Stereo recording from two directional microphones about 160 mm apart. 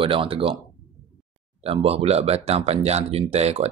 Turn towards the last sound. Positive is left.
turn(degrees=-40)  # may be behind; listen again after turning